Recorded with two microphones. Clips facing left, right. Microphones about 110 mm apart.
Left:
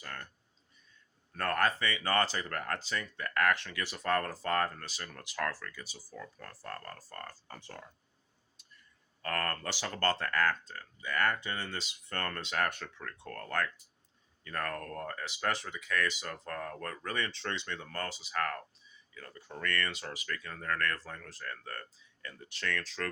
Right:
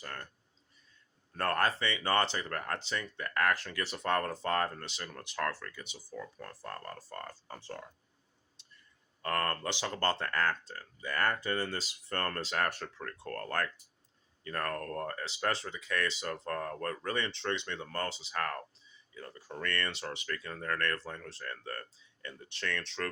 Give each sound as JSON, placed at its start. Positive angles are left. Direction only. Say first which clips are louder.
{"t": 0.0, "sound": "speech", "louder": "right 1 dB", "side_deg": -30}
{"t": 1.4, "sound": "speech", "louder": "even", "side_deg": -30}
{"t": 3.5, "sound": "speech", "louder": "even", "side_deg": -40}
{"t": 8.6, "sound": "clicking", "louder": "left 1 dB", "side_deg": -25}
{"t": 9.2, "sound": "speech", "louder": "right 2 dB", "side_deg": -25}